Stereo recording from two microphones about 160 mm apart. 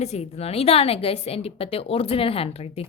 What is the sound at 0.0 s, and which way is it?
A woman's voice, 45° left (ahead or behind).